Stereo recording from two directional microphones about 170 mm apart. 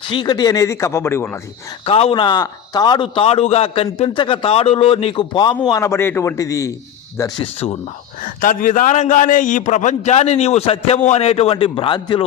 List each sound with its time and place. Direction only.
0.1 s speech: 25° left (ahead or behind)
1.8 s a man's voice: 35° left (ahead or behind); by 6.7 s 20° left (ahead or behind)
7.4 s a man's voice: 35° left (ahead or behind)
8.2 s a man's voice: 55° left (ahead or behind); by 12.2 s 30° left (ahead or behind)